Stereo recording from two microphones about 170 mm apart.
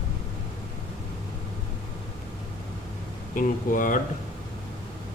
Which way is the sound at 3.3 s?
50° left (ahead or behind).